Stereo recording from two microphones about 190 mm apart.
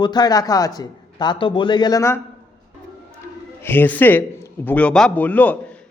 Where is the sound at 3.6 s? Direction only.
10° left (ahead or behind).